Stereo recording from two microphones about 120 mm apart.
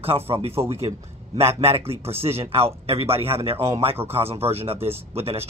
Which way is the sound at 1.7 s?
55° right (ahead or behind).